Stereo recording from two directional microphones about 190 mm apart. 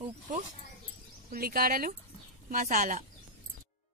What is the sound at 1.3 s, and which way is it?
Speech, 50° right (ahead or behind).